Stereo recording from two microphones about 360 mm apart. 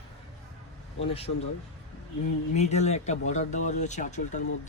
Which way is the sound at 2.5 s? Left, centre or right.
Centre.